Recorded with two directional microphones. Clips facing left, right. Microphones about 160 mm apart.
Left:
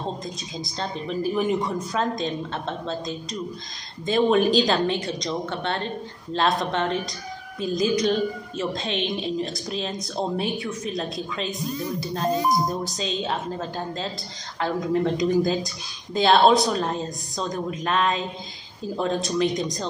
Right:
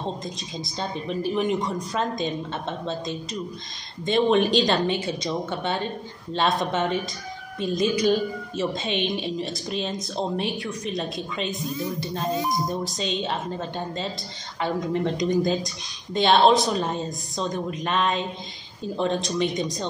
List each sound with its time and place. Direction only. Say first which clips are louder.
0.2 s a woman's voice: even; 5° right (ahead or behind)